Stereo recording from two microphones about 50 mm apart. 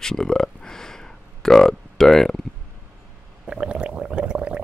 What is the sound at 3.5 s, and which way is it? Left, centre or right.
Stomach rumble, centre.